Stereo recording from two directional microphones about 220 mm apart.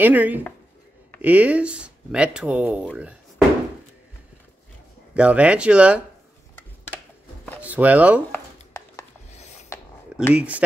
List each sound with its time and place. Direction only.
0.0 s speech: 10° right (ahead or behind)
5.1 s speech: 5° right (ahead or behind)
7.6 s speech: 5° right (ahead or behind)
8.3 s a sound: 10° left (ahead or behind)
9.3 s filing: 30° left (ahead or behind)
10.3 s speech: 5° right (ahead or behind)